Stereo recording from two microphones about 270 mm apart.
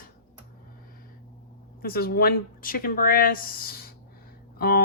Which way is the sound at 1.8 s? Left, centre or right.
Left.